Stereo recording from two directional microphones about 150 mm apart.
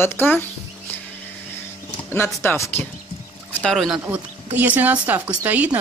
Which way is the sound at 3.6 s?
Centre (ahead or behind).